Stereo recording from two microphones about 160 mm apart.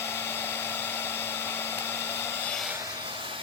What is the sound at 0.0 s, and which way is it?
Hair dryer, 15° left (ahead or behind).